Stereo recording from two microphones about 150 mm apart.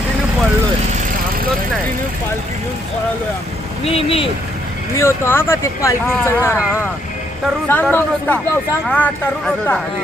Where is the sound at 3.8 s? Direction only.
40° left (ahead or behind).